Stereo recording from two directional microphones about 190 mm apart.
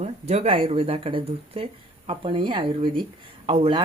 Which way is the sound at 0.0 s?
35° right (ahead or behind).